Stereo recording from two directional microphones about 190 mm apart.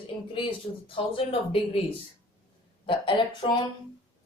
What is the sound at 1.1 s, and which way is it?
Speech, 30° left (ahead or behind).